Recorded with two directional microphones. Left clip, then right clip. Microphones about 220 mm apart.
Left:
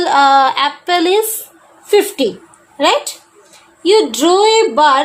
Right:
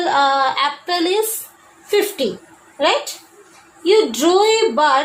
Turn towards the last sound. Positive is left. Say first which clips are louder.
# left 4 dB
turn(degrees=45)  # may be behind; listen again after turning